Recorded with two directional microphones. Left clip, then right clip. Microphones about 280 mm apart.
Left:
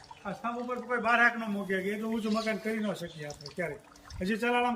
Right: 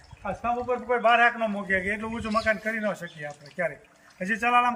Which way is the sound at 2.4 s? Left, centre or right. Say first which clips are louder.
Right 7 dB; centre.